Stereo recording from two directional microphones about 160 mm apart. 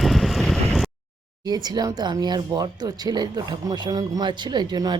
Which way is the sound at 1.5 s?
25° right (ahead or behind).